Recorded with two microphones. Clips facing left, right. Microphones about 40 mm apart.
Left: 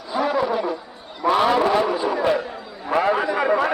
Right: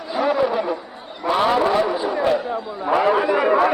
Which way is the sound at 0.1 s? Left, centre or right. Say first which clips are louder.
Right 2 dB; centre.